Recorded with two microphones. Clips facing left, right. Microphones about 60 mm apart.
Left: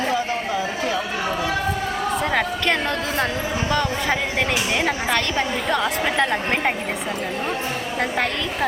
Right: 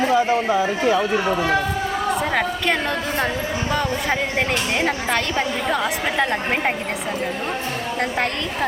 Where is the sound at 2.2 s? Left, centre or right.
Centre.